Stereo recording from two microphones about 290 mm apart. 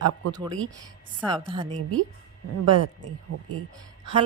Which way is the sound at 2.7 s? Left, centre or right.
Right.